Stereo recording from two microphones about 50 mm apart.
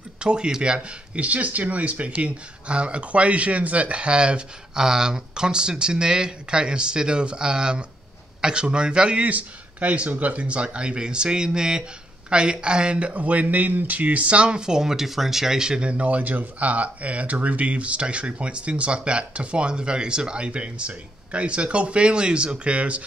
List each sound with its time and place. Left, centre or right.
0.2 s speech: centre